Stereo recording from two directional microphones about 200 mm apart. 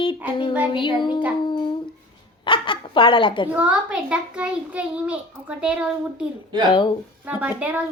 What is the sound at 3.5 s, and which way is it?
A child's voice, 5° right (ahead or behind).